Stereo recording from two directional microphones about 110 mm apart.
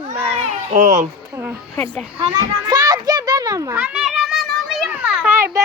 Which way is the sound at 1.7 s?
15° left (ahead or behind).